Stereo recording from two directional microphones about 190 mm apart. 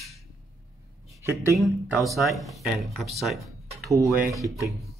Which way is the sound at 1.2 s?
15° right (ahead or behind).